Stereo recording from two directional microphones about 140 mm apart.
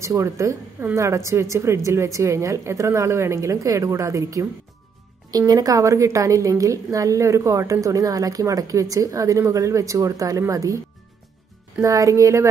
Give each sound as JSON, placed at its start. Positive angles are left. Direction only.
{"t": 0.0, "sound": "a woman's voice", "side_deg": -20}
{"t": 5.5, "sound": "a woman's voice", "side_deg": -25}
{"t": 11.8, "sound": "a woman's voice", "side_deg": -25}